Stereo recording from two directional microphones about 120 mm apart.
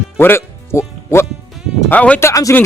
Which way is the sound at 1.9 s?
10° left (ahead or behind).